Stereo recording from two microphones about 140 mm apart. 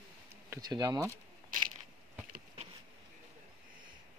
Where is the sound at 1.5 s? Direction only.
75° right (ahead or behind).